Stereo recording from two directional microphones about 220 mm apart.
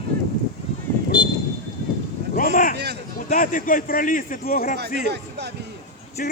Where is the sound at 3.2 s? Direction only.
35° left (ahead or behind).